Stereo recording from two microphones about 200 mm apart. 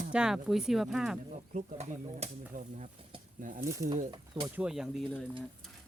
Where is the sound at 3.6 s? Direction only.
15° right (ahead or behind).